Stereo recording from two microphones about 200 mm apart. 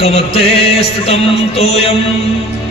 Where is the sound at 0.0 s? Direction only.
30° left (ahead or behind).